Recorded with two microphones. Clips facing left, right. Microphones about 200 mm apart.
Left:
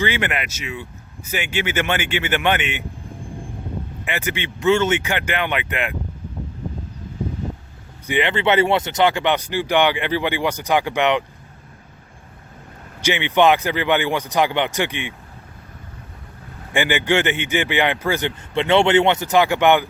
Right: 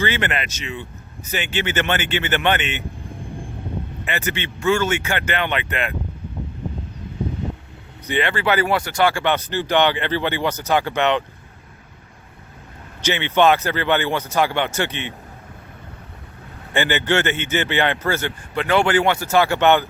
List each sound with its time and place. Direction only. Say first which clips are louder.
0.0 s speech: even; 10° left (ahead or behind)
4.0 s speech: even; 15° left (ahead or behind)
8.0 s speech: left 2 dB; 15° left (ahead or behind)
13.0 s speech: left 1 dB; 15° left (ahead or behind)
16.7 s speech: left 1 dB; 15° left (ahead or behind)